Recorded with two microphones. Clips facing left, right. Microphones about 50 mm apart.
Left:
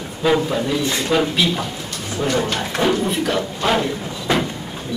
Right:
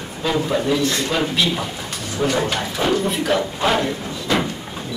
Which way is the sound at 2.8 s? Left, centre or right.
Centre.